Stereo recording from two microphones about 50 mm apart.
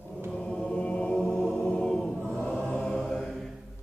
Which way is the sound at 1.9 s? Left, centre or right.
Centre.